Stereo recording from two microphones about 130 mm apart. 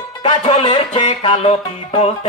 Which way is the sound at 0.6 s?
40° left (ahead or behind).